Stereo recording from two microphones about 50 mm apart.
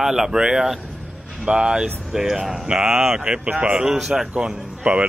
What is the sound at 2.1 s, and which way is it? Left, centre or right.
Speech, centre.